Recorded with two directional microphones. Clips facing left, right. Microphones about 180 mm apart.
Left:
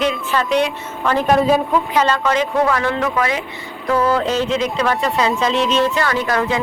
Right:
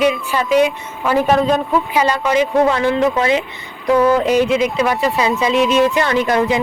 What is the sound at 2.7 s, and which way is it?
A woman's voice, 20° right (ahead or behind).